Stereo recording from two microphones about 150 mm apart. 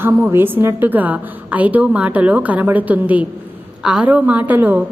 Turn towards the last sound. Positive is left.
turn(degrees=-10)  # may be behind; listen again after turning